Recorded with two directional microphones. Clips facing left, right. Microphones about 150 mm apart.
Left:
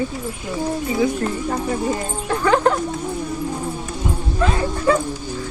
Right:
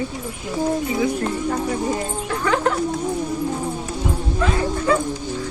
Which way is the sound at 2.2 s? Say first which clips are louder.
Left 5 dB; 35° left (ahead or behind).